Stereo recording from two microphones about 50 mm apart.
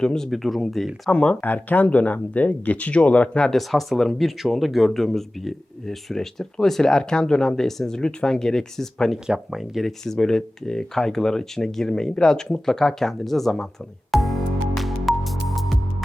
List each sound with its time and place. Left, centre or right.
0.0 s speech: centre
0.3 s speech: centre
1.1 s speech: left
1.4 s speech: left
3.5 s speech: centre
9.5 s speech: centre
10.0 s speech: centre
14.1 s music: centre